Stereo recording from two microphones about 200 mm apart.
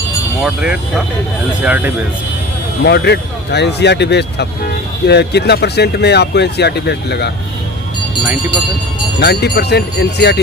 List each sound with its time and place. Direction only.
0.4 s speech: 5° right (ahead or behind)
2.8 s speech: 55° left (ahead or behind)
9.2 s speech: 55° left (ahead or behind)